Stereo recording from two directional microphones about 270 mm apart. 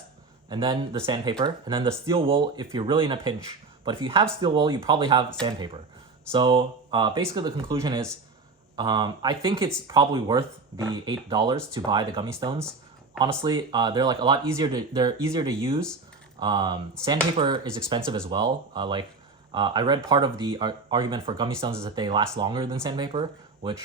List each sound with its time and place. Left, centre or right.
0.5 s speech: centre